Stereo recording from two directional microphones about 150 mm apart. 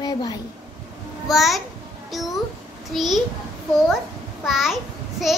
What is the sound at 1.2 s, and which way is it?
A child's voice, centre (ahead or behind).